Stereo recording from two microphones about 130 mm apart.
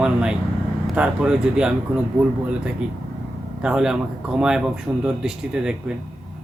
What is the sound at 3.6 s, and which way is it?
A man's voice, 5° right (ahead or behind).